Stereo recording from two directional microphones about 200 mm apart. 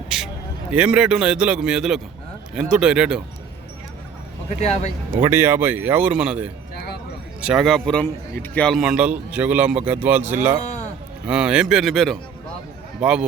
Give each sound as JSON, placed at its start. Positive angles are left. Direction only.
{"t": 0.7, "sound": "a man's voice", "side_deg": -5}
{"t": 4.4, "sound": "speech", "side_deg": 35}
{"t": 5.2, "sound": "a man's voice", "side_deg": -10}